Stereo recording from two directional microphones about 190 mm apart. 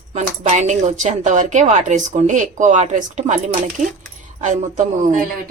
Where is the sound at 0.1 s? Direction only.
35° right (ahead or behind).